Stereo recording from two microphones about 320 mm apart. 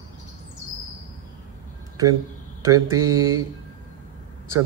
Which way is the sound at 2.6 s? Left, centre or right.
Centre.